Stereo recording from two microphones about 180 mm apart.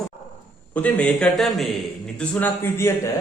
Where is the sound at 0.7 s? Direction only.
10° left (ahead or behind).